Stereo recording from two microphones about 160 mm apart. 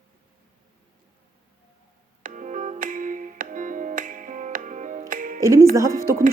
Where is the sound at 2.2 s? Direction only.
50° right (ahead or behind).